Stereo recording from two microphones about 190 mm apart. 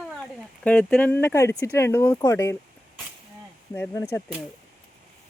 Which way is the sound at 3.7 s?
10° left (ahead or behind).